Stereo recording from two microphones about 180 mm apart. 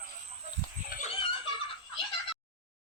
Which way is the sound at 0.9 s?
55° left (ahead or behind).